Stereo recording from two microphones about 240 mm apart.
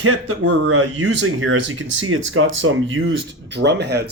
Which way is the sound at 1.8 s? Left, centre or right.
Right.